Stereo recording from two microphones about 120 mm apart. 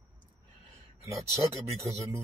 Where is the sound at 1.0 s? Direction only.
25° right (ahead or behind).